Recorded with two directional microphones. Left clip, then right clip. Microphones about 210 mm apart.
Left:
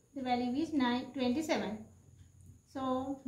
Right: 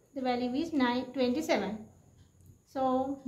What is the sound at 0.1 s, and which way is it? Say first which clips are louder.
A woman's voice: right 3 dB; 30° right (ahead or behind).